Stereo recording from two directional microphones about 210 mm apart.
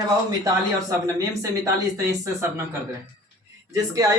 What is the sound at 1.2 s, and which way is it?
Speech, 15° right (ahead or behind).